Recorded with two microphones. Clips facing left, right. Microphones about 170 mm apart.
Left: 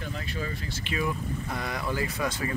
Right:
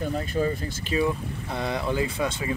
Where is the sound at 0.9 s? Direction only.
25° right (ahead or behind).